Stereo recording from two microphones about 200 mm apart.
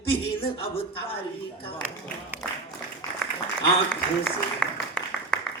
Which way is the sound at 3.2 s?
5° left (ahead or behind).